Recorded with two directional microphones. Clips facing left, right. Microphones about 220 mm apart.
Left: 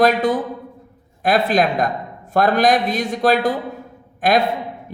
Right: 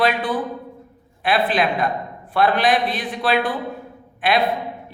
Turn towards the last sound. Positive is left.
turn(degrees=45)  # may be behind; listen again after turning